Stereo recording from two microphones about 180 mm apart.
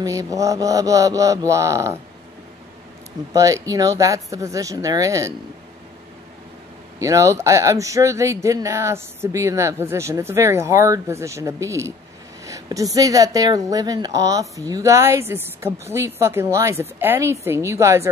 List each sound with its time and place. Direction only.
0.0 s speech: 20° right (ahead or behind)
3.3 s speech: 20° right (ahead or behind)
7.0 s a woman's voice: 15° right (ahead or behind)